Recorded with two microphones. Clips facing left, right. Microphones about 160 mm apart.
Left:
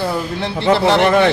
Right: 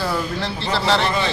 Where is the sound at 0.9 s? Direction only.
60° left (ahead or behind).